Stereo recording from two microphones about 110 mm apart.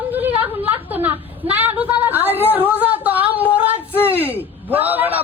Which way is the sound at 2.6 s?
15° right (ahead or behind).